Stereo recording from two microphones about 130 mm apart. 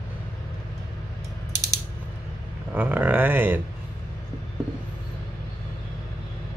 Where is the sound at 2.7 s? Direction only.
15° right (ahead or behind).